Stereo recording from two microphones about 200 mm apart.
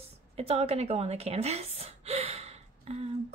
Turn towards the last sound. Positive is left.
turn(degrees=-30)  # may be behind; listen again after turning